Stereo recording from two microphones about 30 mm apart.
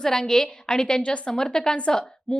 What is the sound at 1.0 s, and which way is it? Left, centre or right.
Speech, left.